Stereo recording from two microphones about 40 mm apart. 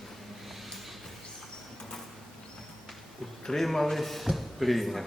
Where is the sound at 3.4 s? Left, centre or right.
Centre.